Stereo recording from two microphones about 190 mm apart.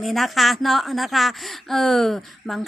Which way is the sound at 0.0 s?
Centre (ahead or behind).